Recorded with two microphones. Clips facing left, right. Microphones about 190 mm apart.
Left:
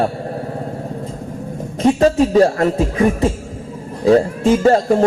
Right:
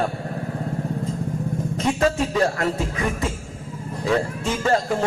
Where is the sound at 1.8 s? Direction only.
35° left (ahead or behind).